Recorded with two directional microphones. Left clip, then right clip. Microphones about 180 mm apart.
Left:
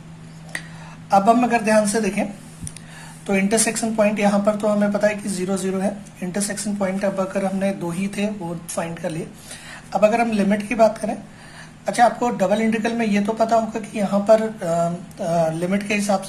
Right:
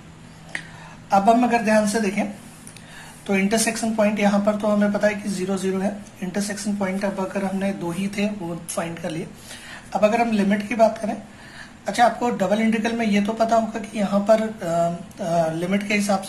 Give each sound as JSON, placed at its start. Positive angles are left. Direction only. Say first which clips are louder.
{"t": 1.1, "sound": "speech", "louder": "left 1 dB", "side_deg": 25}
{"t": 3.3, "sound": "speech", "louder": "left 1 dB", "side_deg": 25}